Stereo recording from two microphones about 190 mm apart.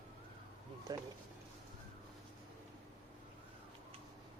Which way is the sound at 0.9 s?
20° right (ahead or behind).